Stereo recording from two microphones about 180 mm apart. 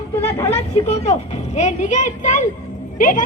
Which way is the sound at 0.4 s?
35° left (ahead or behind).